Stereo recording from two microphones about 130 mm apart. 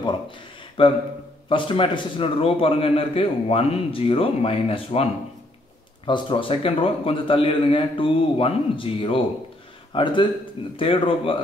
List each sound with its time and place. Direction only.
0.8 s a man's voice: 40° left (ahead or behind)
6.0 s a man's voice: 40° left (ahead or behind)